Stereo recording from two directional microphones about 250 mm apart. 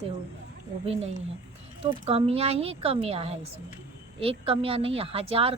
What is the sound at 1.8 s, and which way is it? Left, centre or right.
Speech, right.